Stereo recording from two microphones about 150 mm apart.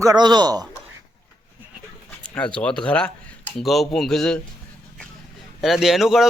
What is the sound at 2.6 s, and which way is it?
Speech, 5° left (ahead or behind).